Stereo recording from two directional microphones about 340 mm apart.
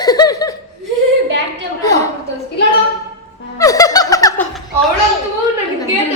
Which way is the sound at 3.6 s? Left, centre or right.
Centre.